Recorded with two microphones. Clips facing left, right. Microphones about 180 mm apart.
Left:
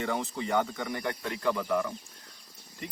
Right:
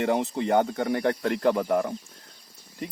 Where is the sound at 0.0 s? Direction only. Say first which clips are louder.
Right 7 dB; 60° right (ahead or behind).